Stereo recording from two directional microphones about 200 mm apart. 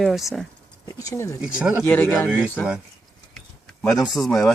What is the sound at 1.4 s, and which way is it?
Speech, 5° right (ahead or behind).